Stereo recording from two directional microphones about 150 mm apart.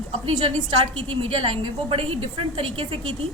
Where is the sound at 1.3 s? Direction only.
40° right (ahead or behind).